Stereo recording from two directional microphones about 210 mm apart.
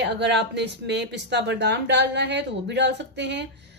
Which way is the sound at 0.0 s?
55° right (ahead or behind).